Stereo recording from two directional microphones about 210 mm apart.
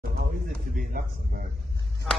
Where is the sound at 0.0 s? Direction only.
40° right (ahead or behind).